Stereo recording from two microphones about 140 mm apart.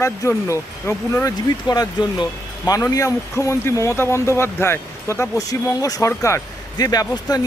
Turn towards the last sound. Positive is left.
turn(degrees=30)  # may be behind; listen again after turning